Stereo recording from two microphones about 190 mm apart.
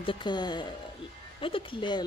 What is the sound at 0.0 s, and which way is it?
Speech, 25° left (ahead or behind).